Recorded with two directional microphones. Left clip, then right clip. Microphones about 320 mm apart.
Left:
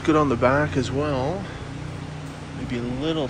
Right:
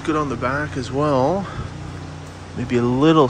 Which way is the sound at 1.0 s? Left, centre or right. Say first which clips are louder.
Right 12 dB; right.